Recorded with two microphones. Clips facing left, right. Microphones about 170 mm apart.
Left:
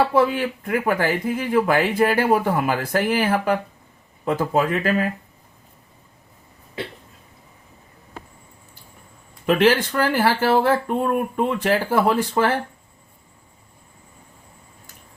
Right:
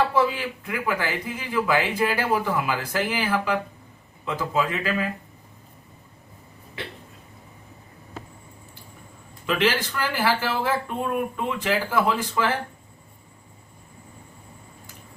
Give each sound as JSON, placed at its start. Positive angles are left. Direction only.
{"t": 0.1, "sound": "speech", "side_deg": 55}
{"t": 9.5, "sound": "speech", "side_deg": 50}